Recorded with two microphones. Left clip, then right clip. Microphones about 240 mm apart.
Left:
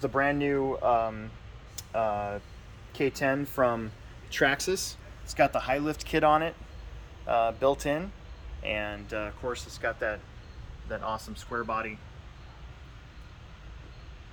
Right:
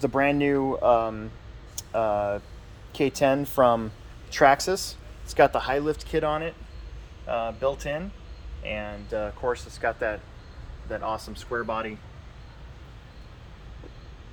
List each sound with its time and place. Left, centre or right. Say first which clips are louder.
0.0 s speech: right 4 dB; right
4.3 s speech: right 7 dB; centre
9.0 s speech: right 5 dB; centre
9.8 s speech: right 4 dB; right
11.0 s speech: right 4 dB; right